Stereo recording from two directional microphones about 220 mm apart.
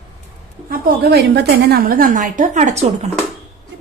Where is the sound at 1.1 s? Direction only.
45° right (ahead or behind); by 2.9 s 30° right (ahead or behind).